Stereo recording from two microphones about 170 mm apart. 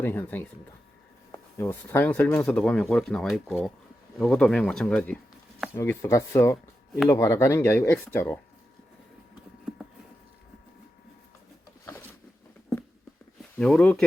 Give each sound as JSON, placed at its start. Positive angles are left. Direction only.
{"t": 0.0, "sound": "speech", "side_deg": 10}
{"t": 13.6, "sound": "speech", "side_deg": 5}